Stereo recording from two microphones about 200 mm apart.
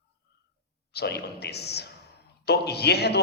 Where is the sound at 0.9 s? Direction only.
55° left (ahead or behind).